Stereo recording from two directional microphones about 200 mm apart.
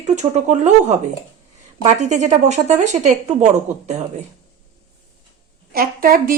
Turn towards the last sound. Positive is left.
turn(degrees=-45)  # may be behind; listen again after turning